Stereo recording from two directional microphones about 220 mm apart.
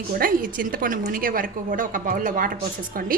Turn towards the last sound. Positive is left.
turn(degrees=-40)  # may be behind; listen again after turning